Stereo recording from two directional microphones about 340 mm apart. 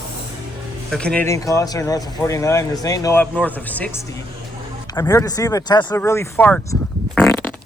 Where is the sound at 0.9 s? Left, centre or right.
Centre.